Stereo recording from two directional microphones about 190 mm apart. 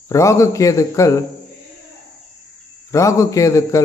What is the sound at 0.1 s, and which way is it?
A man's voice, 15° left (ahead or behind).